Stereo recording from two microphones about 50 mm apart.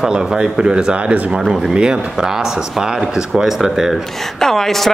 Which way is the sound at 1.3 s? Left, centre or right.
Centre.